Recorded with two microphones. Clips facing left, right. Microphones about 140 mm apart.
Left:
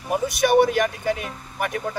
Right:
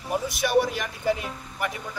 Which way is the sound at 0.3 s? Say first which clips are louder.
Left 6 dB; 65° left (ahead or behind).